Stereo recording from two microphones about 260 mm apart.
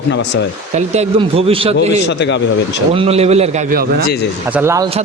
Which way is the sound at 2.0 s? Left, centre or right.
Left.